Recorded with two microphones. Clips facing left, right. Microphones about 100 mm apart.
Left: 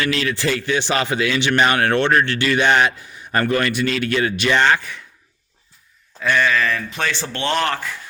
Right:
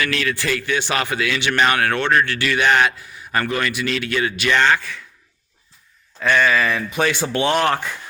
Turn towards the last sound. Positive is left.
turn(degrees=-15)  # may be behind; listen again after turning